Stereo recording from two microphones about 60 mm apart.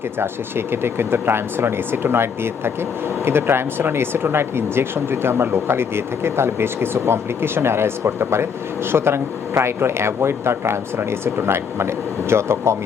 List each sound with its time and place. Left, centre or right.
0.2 s speech: right